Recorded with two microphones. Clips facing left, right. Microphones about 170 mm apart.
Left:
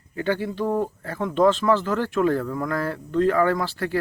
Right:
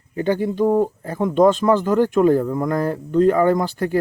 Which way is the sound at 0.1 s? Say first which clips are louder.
Right 5 dB; 20° right (ahead or behind).